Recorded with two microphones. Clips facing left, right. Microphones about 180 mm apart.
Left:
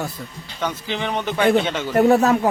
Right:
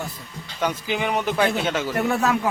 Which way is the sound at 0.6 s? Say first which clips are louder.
Right 1 dB; 10° right (ahead or behind).